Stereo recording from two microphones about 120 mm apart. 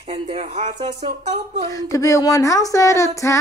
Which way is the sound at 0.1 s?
60° right (ahead or behind).